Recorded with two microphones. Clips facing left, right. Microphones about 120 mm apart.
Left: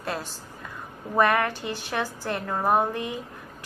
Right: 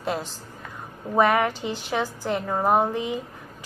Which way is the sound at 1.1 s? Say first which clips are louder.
Right 2 dB; 15° right (ahead or behind).